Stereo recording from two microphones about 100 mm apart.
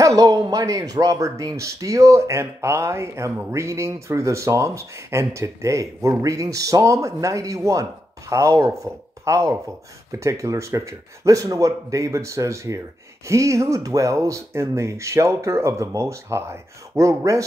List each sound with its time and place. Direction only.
0.0 s speech: 35° right (ahead or behind)